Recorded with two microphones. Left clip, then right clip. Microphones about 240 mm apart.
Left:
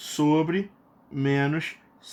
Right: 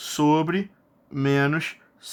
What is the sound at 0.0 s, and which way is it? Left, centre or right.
Speech, right.